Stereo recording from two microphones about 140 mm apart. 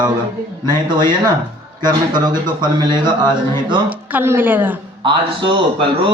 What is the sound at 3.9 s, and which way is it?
Speech, 10° right (ahead or behind).